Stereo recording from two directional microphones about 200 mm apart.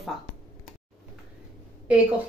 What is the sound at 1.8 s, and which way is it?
Speech, 5° right (ahead or behind).